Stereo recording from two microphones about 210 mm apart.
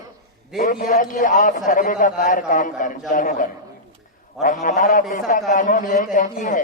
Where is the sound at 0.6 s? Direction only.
40° left (ahead or behind).